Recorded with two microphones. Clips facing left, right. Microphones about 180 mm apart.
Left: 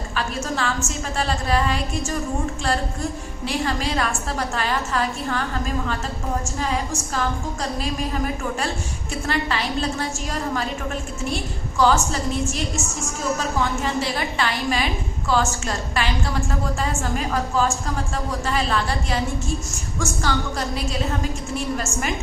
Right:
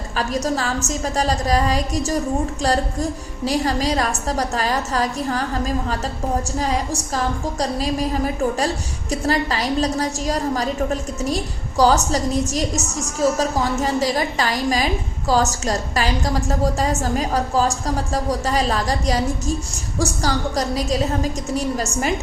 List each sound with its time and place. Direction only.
0.2 s a woman's voice: 40° right (ahead or behind)